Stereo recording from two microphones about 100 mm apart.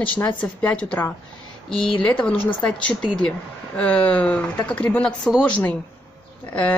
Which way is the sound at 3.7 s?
10° left (ahead or behind).